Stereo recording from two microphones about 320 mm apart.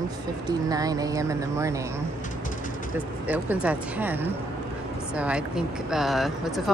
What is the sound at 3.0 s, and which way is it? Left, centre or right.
Speech, centre.